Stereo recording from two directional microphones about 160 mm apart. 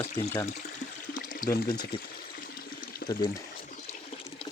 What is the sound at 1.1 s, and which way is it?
Water, 60° left (ahead or behind).